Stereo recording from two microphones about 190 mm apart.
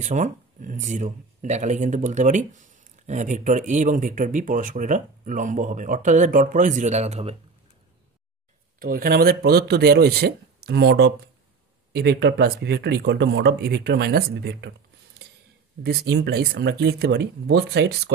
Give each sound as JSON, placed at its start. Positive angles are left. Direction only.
{"t": 0.0, "sound": "speech", "side_deg": -40}
{"t": 8.7, "sound": "speech", "side_deg": -50}
{"t": 15.8, "sound": "speech", "side_deg": -55}